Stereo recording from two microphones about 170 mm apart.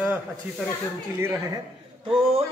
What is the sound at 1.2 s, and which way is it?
Speech, 15° right (ahead or behind).